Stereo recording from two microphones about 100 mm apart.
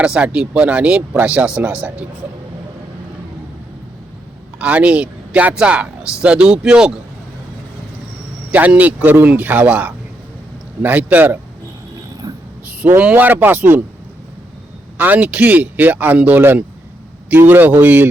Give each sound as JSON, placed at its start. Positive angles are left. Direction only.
{"t": 0.0, "sound": "speech", "side_deg": -10}
{"t": 4.6, "sound": "speech", "side_deg": -15}
{"t": 8.5, "sound": "speech", "side_deg": -15}
{"t": 12.6, "sound": "speech", "side_deg": -15}
{"t": 14.9, "sound": "speech", "side_deg": -15}